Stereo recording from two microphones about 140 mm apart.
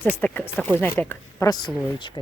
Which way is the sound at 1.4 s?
30° left (ahead or behind).